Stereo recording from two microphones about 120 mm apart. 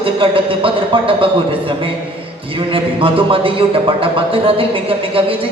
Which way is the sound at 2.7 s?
45° right (ahead or behind).